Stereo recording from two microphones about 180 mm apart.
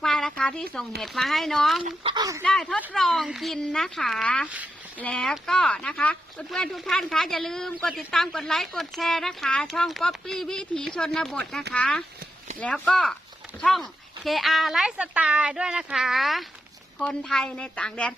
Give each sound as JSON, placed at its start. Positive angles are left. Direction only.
{"t": 0.0, "sound": "a sound", "side_deg": 5}
{"t": 1.0, "sound": "speech", "side_deg": 0}
{"t": 1.8, "sound": "speech", "side_deg": -30}
{"t": 2.4, "sound": "speech", "side_deg": 5}